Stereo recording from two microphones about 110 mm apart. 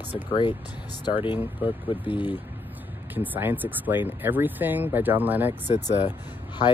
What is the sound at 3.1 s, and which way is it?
Speech, 15° right (ahead or behind).